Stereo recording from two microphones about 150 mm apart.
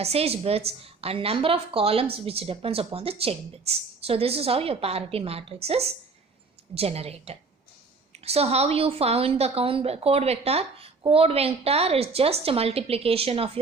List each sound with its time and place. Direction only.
0.0 s a woman's voice: 40° right (ahead or behind)